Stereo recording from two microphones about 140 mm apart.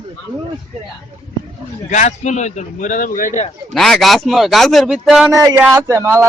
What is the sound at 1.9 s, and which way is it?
A man's voice, 60° left (ahead or behind).